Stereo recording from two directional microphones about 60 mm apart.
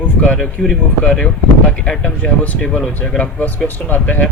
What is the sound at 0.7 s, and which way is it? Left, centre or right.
Speech, centre.